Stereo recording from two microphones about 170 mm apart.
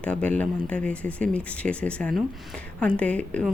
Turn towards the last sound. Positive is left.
turn(degrees=5)  # may be behind; listen again after turning